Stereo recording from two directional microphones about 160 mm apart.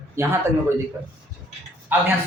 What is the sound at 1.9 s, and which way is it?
Speech, 10° right (ahead or behind).